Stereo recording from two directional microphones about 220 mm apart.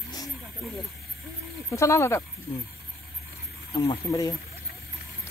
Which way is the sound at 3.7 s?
20° left (ahead or behind).